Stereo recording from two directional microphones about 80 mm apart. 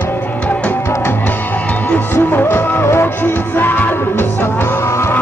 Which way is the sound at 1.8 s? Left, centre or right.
Left.